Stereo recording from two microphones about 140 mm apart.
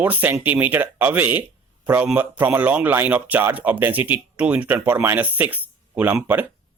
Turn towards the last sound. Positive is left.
turn(degrees=-15)  # may be behind; listen again after turning